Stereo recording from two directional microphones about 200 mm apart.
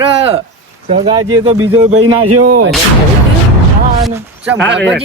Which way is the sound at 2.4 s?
45° right (ahead or behind).